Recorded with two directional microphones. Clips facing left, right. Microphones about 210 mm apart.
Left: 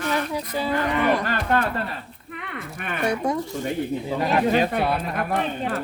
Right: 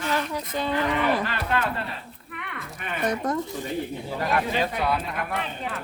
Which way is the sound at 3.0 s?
10° left (ahead or behind).